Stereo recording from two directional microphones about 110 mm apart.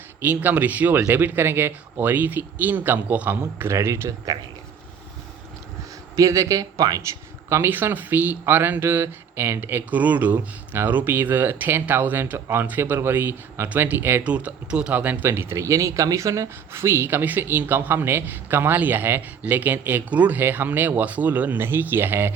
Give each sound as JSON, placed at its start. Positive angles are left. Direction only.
{"t": 0.2, "sound": "speech", "side_deg": -15}
{"t": 6.1, "sound": "speech", "side_deg": -30}
{"t": 7.5, "sound": "speech", "side_deg": -20}